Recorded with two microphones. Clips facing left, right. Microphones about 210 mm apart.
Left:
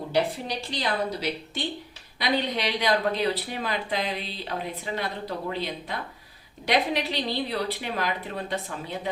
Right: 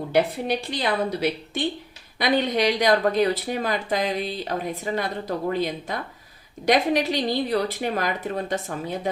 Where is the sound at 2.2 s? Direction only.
45° right (ahead or behind).